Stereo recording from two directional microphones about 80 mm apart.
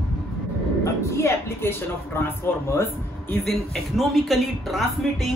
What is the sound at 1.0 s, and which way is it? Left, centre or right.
Speech, left.